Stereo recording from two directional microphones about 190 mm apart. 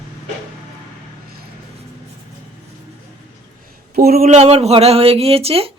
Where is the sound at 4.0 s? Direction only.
50° right (ahead or behind).